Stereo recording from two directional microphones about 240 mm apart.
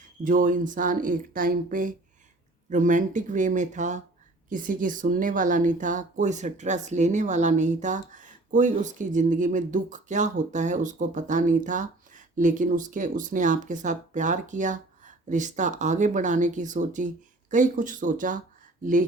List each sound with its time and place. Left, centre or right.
0.3 s a woman's voice: right